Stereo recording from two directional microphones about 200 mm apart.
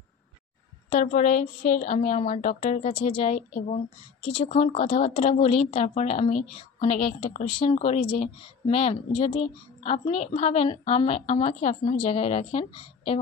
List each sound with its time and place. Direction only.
0.8 s a woman's voice: 35° left (ahead or behind)